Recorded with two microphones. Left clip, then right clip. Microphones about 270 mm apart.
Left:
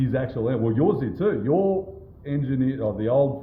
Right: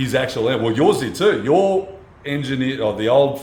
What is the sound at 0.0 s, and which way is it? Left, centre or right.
Speech, centre.